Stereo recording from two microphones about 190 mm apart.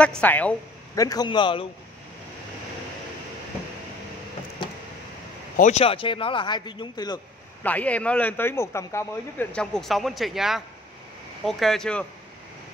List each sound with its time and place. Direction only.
0.2 s speech: 10° left (ahead or behind)
1.0 s a man's voice: 20° left (ahead or behind)
5.6 s a man's voice: 35° left (ahead or behind)
7.6 s speech: 5° left (ahead or behind)